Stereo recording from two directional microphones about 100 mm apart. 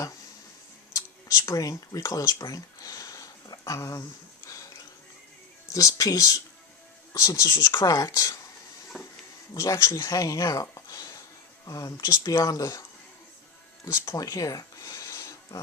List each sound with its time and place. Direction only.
0.9 s a sound: 35° left (ahead or behind)
5.6 s speech: 35° left (ahead or behind)
7.7 s speech: 50° left (ahead or behind)
7.9 s speech: 30° left (ahead or behind)
8.9 s speech: 20° left (ahead or behind)
9.6 s speech: 30° left (ahead or behind)
13.8 s speech: 35° left (ahead or behind)
14.1 s a sound: 35° left (ahead or behind)